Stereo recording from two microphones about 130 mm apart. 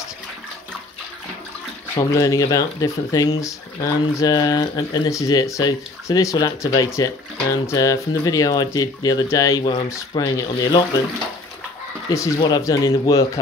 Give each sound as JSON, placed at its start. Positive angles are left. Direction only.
{"t": 2.0, "sound": "speech", "side_deg": 25}
{"t": 12.1, "sound": "speech", "side_deg": 25}